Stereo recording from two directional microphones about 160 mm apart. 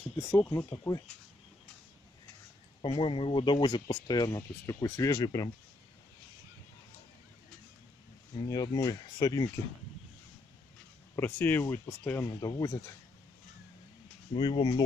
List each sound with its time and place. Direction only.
0.2 s speech: 15° left (ahead or behind)
2.8 s speech: 35° left (ahead or behind)
8.5 s speech: 25° left (ahead or behind)
11.1 s speech: 10° left (ahead or behind)
14.3 s speech: 30° left (ahead or behind)